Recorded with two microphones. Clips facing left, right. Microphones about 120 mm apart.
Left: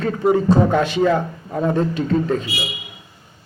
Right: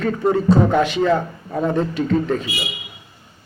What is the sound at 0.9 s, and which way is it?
A man's voice, 10° left (ahead or behind).